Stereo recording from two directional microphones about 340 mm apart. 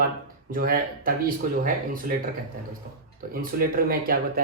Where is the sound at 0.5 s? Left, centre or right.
Right.